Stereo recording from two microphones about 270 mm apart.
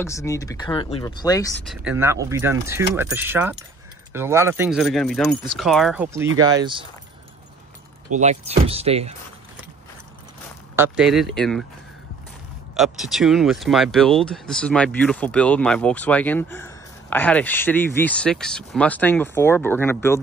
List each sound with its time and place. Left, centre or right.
0.0 s speech: centre
1.6 s speech: centre
6.4 s speech: centre
8.1 s speech: right
10.8 s speech: centre
12.7 s speech: centre